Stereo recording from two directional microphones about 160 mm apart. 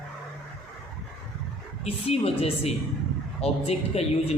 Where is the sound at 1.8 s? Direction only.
40° left (ahead or behind).